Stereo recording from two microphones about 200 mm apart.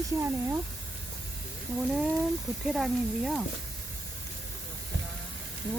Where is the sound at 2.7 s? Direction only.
Centre (ahead or behind).